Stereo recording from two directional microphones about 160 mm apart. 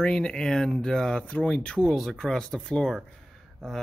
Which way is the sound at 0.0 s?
5° left (ahead or behind).